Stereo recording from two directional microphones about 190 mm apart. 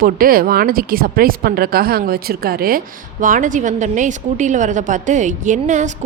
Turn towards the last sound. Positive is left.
turn(degrees=-40)  # may be behind; listen again after turning